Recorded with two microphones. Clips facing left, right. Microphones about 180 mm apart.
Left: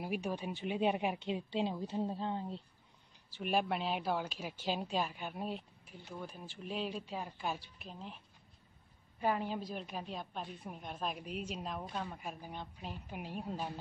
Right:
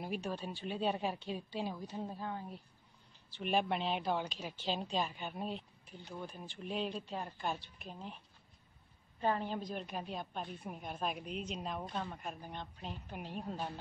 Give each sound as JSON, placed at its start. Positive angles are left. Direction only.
{"t": 0.0, "sound": "a woman's voice", "side_deg": 10}
{"t": 3.3, "sound": "a woman's voice", "side_deg": 5}
{"t": 9.2, "sound": "a woman's voice", "side_deg": 10}